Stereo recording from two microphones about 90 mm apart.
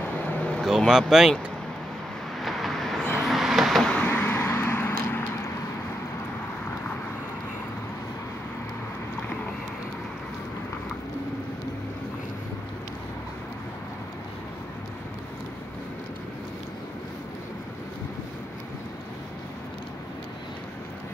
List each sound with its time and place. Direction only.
0.6 s speech: centre (ahead or behind)
2.4 s vehicle: centre (ahead or behind)
4.1 s vehicle: 20° left (ahead or behind)